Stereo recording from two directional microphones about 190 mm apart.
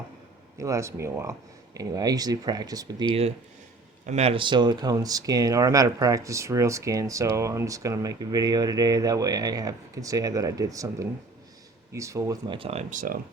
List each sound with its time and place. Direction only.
0.5 s speech: 15° right (ahead or behind)
4.0 s speech: 35° right (ahead or behind)